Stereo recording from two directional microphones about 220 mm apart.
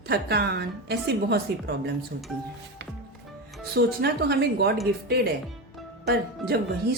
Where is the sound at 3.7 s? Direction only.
45° right (ahead or behind).